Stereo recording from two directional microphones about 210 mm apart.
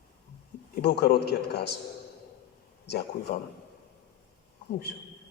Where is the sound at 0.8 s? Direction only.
50° left (ahead or behind).